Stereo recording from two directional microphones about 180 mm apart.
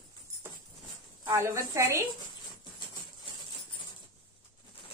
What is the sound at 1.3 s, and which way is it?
Speech, 15° right (ahead or behind).